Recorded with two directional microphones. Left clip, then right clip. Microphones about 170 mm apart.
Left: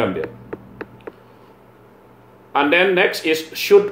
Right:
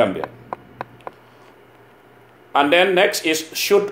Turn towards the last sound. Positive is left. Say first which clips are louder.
# left 2 dB
turn(degrees=-40)  # may be behind; listen again after turning